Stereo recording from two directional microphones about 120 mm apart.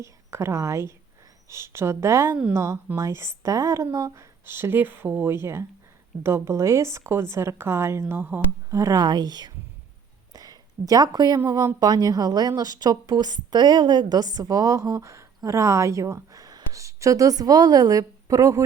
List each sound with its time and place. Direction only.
0.0 s speech: 25° right (ahead or behind)
10.3 s a sound: 30° right (ahead or behind)
11.3 s speech: 25° right (ahead or behind)